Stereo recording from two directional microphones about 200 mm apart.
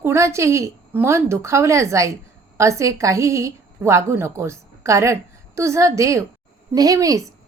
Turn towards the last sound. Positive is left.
turn(degrees=-15)  # may be behind; listen again after turning